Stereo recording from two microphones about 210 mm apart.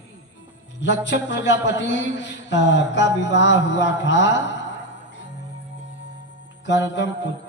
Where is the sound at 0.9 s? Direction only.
55° left (ahead or behind).